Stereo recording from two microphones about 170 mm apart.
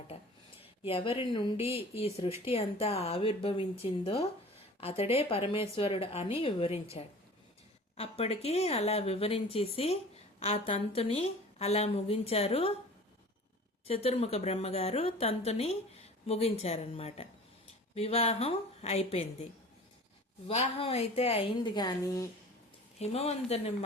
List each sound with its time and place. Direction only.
0.9 s a woman's voice: 35° left (ahead or behind)
7.9 s a woman's voice: 35° left (ahead or behind)
13.8 s a woman's voice: 35° left (ahead or behind)
20.5 s a woman's voice: 35° left (ahead or behind); by 22.3 s 20° left (ahead or behind)
23.0 s a woman's voice: 40° left (ahead or behind)